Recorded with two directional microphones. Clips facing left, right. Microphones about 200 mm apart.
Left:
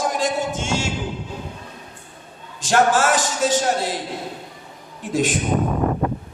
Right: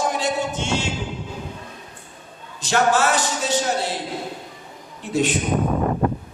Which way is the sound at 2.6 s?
45° left (ahead or behind).